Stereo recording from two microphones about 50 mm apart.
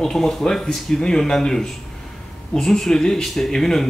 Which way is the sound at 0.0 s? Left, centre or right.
Centre.